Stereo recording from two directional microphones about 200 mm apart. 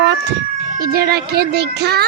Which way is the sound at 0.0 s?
55° right (ahead or behind).